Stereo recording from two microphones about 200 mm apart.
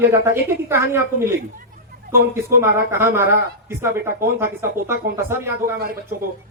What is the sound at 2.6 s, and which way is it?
Speech, 10° right (ahead or behind).